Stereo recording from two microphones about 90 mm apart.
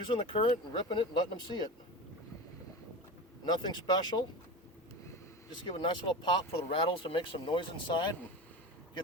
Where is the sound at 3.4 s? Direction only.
50° left (ahead or behind).